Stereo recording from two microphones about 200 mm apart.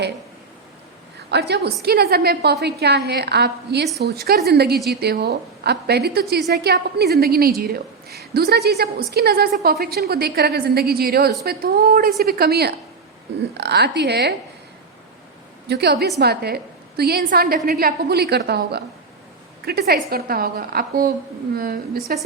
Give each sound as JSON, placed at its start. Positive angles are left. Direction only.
{"t": 1.3, "sound": "a woman's voice", "side_deg": -55}
{"t": 15.7, "sound": "a woman's voice", "side_deg": -55}